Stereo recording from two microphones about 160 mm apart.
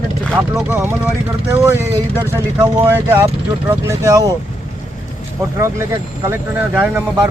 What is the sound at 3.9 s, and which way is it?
Speech, 20° right (ahead or behind).